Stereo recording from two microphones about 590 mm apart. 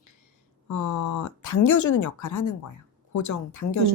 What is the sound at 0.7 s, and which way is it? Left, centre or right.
A woman's voice, left.